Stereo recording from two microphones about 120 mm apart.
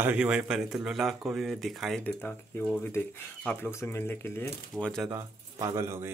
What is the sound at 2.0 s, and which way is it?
Speech, 15° left (ahead or behind).